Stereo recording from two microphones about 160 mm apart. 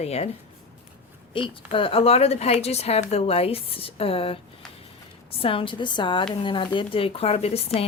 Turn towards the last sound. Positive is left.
turn(degrees=40)  # may be behind; listen again after turning